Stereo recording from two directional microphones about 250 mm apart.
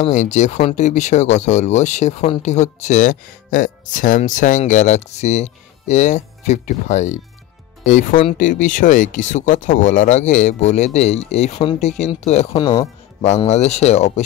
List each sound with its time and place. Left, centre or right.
0.0 s speech: left